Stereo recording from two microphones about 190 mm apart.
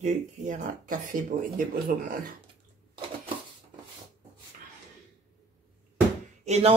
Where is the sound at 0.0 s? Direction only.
45° right (ahead or behind).